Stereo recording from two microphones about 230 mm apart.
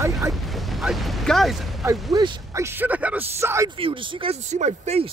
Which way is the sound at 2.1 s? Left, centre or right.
Centre.